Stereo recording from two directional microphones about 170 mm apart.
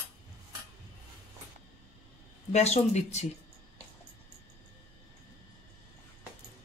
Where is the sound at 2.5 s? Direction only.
40° left (ahead or behind).